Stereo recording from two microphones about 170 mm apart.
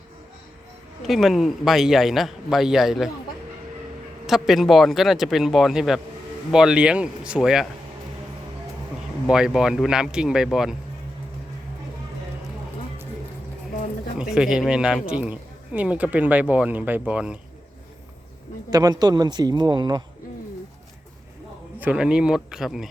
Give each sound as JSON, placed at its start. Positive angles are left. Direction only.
{"t": 1.0, "sound": "a man's voice", "side_deg": 0}
{"t": 4.3, "sound": "a man's voice", "side_deg": 0}
{"t": 9.3, "sound": "a man's voice", "side_deg": -5}
{"t": 14.2, "sound": "a man's voice", "side_deg": -5}
{"t": 18.7, "sound": "a man's voice", "side_deg": -20}
{"t": 21.8, "sound": "a man's voice", "side_deg": -5}